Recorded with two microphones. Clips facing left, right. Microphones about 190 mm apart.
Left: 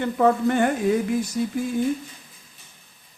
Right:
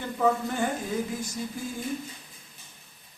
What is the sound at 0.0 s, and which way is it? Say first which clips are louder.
A man's voice: left 6 dB; 65° left (ahead or behind).